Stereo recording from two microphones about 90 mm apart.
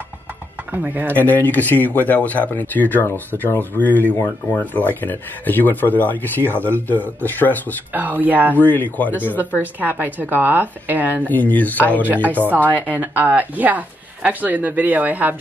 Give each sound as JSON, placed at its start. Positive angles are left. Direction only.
{"t": 0.8, "sound": "speech", "side_deg": -20}
{"t": 1.1, "sound": "speech", "side_deg": 20}
{"t": 7.9, "sound": "speech", "side_deg": -20}
{"t": 8.5, "sound": "speech", "side_deg": 20}
{"t": 9.6, "sound": "speech", "side_deg": -20}
{"t": 11.1, "sound": "speech", "side_deg": 20}
{"t": 12.3, "sound": "speech", "side_deg": -20}